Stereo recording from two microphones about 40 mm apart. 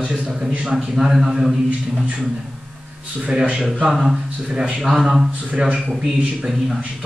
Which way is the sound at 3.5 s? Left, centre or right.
Centre.